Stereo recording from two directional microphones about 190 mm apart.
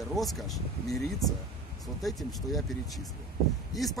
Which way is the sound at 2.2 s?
Centre (ahead or behind).